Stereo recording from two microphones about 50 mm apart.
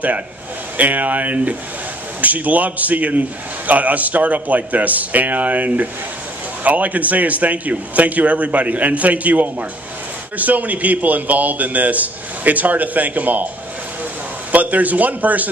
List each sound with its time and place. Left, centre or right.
0.7 s a man's voice: right
14.5 s a man's voice: right